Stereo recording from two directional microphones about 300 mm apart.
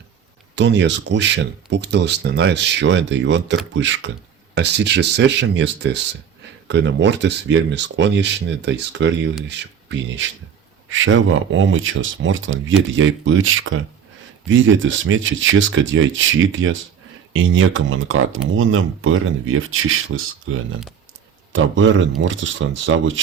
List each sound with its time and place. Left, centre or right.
0.5 s speech: right